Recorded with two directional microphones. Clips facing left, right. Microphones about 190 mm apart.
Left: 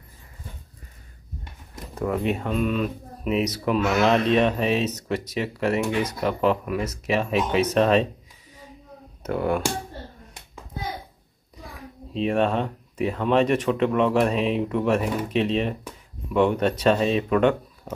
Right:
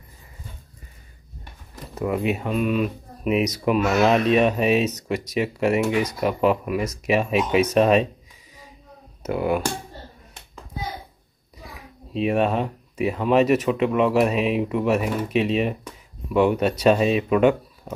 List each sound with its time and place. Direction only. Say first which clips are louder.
2.0 s speech: right 1 dB; 10° right (ahead or behind)
9.2 s speech: right 1 dB; 10° right (ahead or behind)
11.5 s a child's voice: left 2 dB; 10° right (ahead or behind)